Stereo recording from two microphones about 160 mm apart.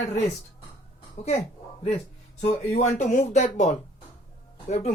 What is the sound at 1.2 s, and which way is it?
Speech, 45° left (ahead or behind).